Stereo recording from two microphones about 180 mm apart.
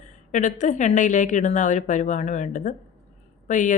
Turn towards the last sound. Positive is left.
turn(degrees=45)  # may be behind; listen again after turning